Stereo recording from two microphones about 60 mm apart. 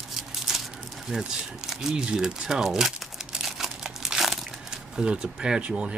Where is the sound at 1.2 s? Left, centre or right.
Centre.